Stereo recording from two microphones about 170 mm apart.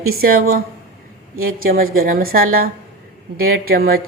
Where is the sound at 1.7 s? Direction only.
60° right (ahead or behind).